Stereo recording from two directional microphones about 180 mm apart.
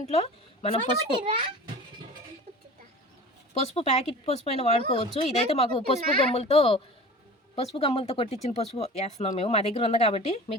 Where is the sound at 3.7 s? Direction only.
40° left (ahead or behind).